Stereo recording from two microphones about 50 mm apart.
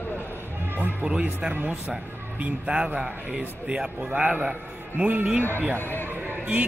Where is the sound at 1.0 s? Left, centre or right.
Right.